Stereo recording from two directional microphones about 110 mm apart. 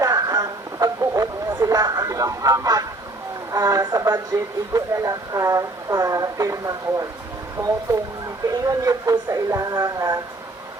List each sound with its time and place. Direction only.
0.0 s a sound: 35° right (ahead or behind)
3.5 s speech: 35° right (ahead or behind)
8.4 s speech: 30° right (ahead or behind)